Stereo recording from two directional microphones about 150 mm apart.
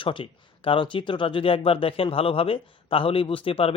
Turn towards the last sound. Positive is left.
turn(degrees=40)  # may be behind; listen again after turning